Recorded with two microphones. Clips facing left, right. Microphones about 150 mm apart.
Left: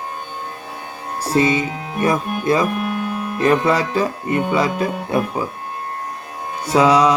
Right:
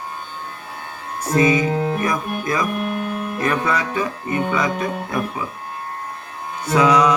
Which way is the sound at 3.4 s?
30° left (ahead or behind).